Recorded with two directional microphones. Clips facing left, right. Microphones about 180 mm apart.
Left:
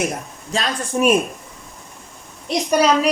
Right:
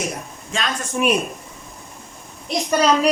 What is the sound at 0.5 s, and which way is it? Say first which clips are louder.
Speech: left 3 dB; 35° left (ahead or behind).